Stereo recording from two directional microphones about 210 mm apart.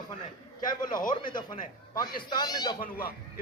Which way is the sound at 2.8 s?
45° left (ahead or behind).